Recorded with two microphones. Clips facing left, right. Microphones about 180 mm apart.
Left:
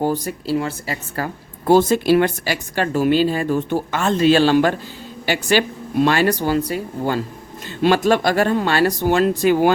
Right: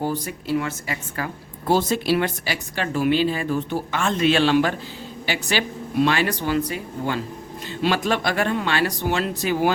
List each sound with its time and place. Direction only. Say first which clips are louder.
0.0 s speech: left 5 dB; 40° left (ahead or behind)